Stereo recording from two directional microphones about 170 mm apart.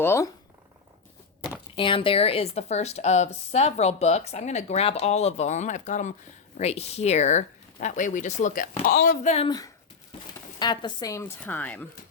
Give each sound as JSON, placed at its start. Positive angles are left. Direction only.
{"t": 0.0, "sound": "speech", "side_deg": 15}
{"t": 1.5, "sound": "speech", "side_deg": 30}
{"t": 10.6, "sound": "a woman's voice", "side_deg": 25}